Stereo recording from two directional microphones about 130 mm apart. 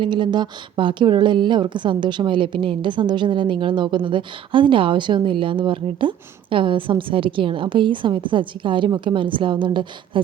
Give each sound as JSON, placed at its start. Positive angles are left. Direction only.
{"t": 0.0, "sound": "a woman's voice", "side_deg": -35}